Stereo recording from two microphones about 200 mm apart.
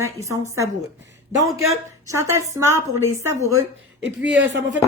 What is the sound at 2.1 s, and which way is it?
A man's voice, 15° right (ahead or behind).